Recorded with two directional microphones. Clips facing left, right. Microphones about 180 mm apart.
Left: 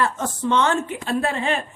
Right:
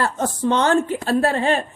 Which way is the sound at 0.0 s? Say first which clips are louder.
Right 2 dB; 35° right (ahead or behind).